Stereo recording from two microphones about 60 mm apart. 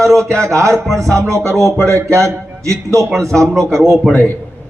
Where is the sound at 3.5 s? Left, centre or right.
Centre.